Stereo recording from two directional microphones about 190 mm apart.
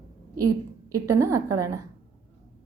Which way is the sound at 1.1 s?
15° right (ahead or behind).